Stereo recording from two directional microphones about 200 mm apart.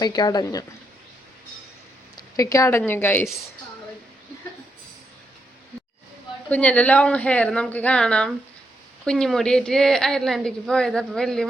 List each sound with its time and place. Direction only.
0.0 s speech: 20° left (ahead or behind)
2.1 s a woman's voice: 15° left (ahead or behind)
6.5 s a woman's voice: 5° left (ahead or behind)